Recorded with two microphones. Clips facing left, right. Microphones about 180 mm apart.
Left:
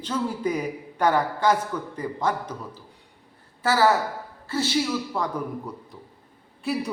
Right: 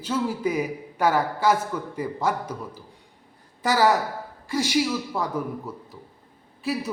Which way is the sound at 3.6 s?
15° right (ahead or behind).